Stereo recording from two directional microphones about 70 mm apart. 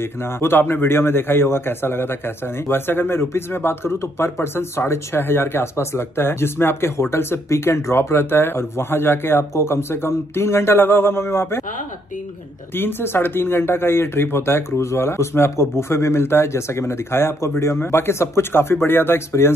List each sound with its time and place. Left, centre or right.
0.0 s a man's voice: left
12.7 s a man's voice: left